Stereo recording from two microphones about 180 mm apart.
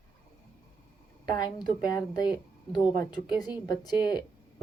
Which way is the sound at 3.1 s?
25° left (ahead or behind).